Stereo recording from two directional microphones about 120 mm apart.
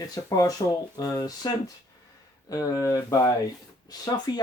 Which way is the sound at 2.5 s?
30° left (ahead or behind).